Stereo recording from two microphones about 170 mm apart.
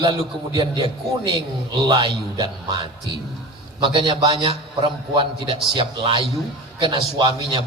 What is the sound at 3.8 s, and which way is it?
A man's voice, 30° right (ahead or behind).